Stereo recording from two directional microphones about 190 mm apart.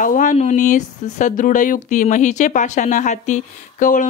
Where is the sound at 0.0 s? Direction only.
45° left (ahead or behind).